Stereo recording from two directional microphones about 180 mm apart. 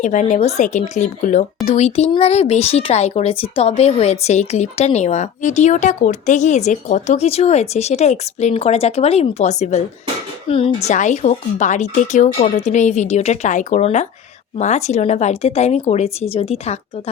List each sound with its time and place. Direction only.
0.0 s speech: 45° left (ahead or behind)